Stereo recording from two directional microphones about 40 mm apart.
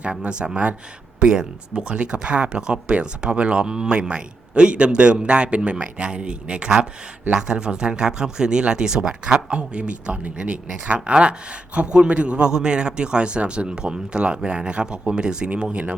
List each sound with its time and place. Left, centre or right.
0.0 s speech: right